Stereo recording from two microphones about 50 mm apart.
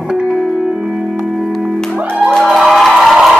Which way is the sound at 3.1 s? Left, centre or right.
Centre.